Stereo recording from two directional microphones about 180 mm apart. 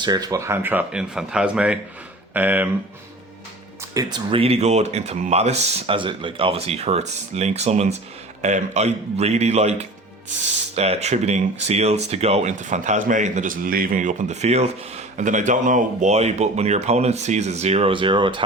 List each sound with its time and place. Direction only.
0.0 s speech: 20° right (ahead or behind)
3.9 s speech: 25° right (ahead or behind)